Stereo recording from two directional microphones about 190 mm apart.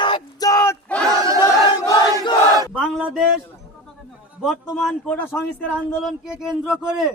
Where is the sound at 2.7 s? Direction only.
5° right (ahead or behind).